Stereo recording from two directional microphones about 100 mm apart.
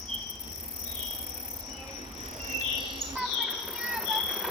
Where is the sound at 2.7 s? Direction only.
60° right (ahead or behind).